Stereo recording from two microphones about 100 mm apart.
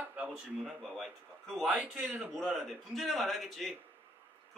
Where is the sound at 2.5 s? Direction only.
Centre (ahead or behind).